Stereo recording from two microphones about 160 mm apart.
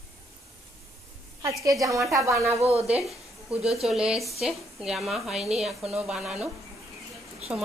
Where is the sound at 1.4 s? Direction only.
20° right (ahead or behind).